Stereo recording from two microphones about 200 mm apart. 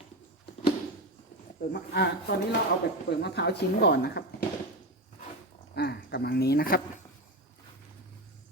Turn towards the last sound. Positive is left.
turn(degrees=50)  # may be behind; listen again after turning